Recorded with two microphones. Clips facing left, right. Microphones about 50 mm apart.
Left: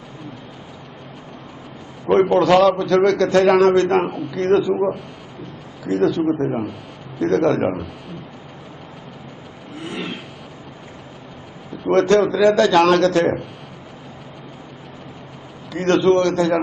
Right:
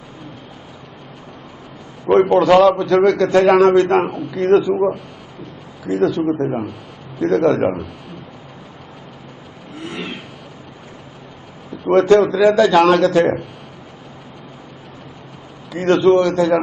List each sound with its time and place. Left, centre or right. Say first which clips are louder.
2.0 s a man's voice: right 2 dB; centre
9.7 s vehicle: even; centre
11.9 s a man's voice: right 3 dB; centre
15.7 s a man's voice: right 2 dB; centre